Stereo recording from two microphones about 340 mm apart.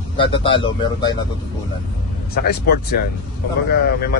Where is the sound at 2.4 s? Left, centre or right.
Left.